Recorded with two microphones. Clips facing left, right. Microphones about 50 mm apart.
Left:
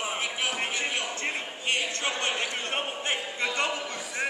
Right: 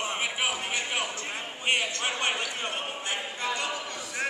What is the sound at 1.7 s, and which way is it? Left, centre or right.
Speech, centre.